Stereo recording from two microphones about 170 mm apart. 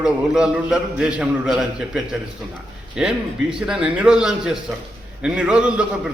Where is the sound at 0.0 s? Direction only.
5° right (ahead or behind).